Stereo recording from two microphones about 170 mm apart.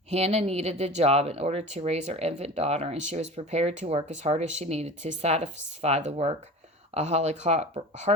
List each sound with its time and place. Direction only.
0.1 s speech: 40° right (ahead or behind)